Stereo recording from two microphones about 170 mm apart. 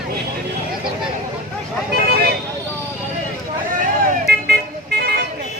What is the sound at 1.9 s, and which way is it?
Vehicle, 70° right (ahead or behind).